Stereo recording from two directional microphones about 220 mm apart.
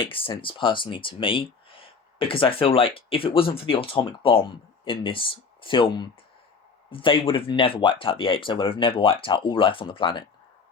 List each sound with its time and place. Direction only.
0.0 s speech: 25° left (ahead or behind)